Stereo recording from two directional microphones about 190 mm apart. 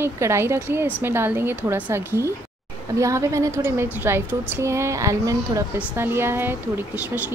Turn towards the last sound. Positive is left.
turn(degrees=-10)  # may be behind; listen again after turning